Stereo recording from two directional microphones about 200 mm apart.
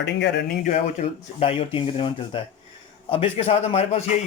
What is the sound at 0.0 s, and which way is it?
Speech, 60° left (ahead or behind).